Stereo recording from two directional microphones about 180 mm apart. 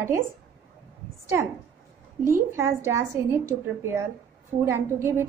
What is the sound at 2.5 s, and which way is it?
Speech, 15° right (ahead or behind).